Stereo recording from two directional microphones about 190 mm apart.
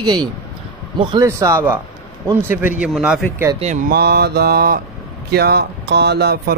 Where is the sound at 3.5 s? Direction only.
35° right (ahead or behind).